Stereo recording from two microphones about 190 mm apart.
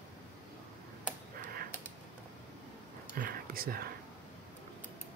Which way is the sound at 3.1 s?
50° right (ahead or behind).